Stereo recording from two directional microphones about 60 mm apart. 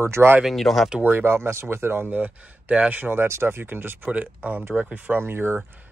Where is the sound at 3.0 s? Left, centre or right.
Right.